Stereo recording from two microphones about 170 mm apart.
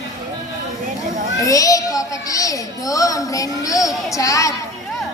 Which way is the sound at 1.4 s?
20° left (ahead or behind).